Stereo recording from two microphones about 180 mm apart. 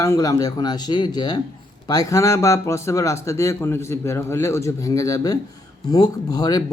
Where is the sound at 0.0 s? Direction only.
15° left (ahead or behind).